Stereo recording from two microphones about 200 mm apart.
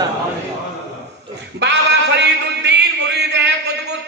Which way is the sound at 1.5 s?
60° right (ahead or behind).